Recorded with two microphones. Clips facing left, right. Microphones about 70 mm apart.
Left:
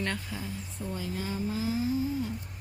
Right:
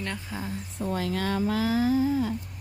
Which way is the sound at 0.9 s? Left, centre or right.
Right.